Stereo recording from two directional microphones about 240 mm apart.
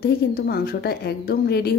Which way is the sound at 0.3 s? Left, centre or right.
Left.